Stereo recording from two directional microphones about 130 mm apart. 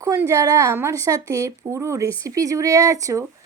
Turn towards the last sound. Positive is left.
turn(degrees=-25)  # may be behind; listen again after turning